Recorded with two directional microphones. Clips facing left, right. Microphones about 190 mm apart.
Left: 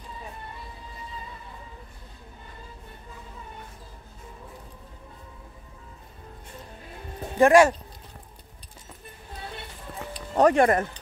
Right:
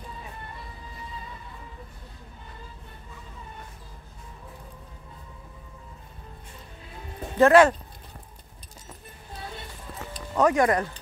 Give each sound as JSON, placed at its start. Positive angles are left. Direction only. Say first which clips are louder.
{"t": 7.3, "sound": "speech", "louder": "even", "side_deg": 10}
{"t": 10.3, "sound": "speech", "louder": "left 2 dB", "side_deg": 35}